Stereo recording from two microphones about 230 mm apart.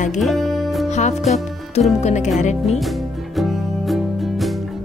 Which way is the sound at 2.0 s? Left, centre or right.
Left.